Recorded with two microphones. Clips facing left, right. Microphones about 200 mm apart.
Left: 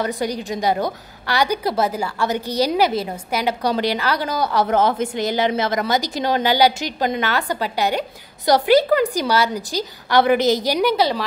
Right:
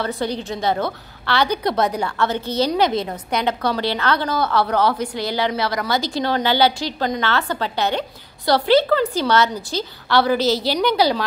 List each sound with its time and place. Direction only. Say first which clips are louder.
0.0 s a woman's voice: left 1 dB; 15° left (ahead or behind)